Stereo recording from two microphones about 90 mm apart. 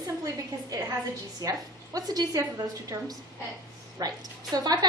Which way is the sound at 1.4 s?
45° right (ahead or behind).